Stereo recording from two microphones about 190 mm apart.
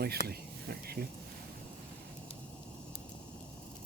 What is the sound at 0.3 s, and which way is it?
Speech, 55° right (ahead or behind).